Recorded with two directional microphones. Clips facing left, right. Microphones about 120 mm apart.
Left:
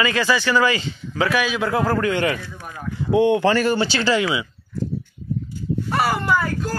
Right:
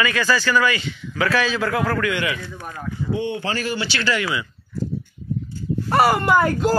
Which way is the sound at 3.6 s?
45° left (ahead or behind).